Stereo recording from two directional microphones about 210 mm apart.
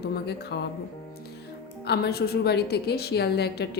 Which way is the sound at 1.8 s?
50° left (ahead or behind).